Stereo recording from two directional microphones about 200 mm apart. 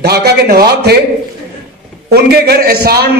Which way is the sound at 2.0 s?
50° right (ahead or behind).